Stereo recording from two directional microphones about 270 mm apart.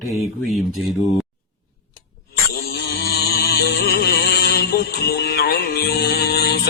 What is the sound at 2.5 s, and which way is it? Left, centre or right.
Music, left.